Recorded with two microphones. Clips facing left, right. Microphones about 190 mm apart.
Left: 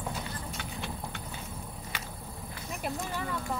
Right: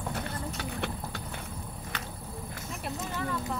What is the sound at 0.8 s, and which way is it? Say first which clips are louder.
Vehicle: right 5 dB; 60° right (ahead or behind).